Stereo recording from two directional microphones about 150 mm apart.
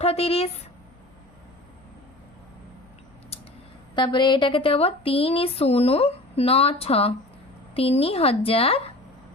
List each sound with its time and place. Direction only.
0.0 s speech: 45° left (ahead or behind)
3.9 s speech: 30° left (ahead or behind)